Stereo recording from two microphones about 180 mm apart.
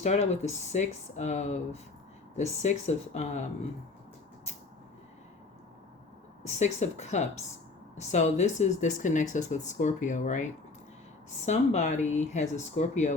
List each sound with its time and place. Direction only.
0.0 s speech: 40° left (ahead or behind)
6.4 s speech: 40° left (ahead or behind)